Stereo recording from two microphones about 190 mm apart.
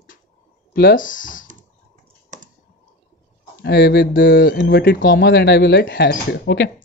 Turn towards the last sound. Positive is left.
turn(degrees=60)  # may be behind; listen again after turning